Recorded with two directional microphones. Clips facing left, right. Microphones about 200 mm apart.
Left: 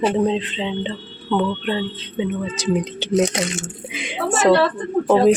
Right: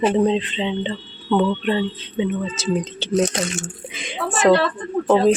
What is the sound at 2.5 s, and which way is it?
Speech, 15° left (ahead or behind).